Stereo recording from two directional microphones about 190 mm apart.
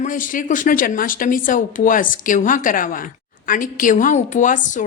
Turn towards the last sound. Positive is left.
turn(degrees=40)  # may be behind; listen again after turning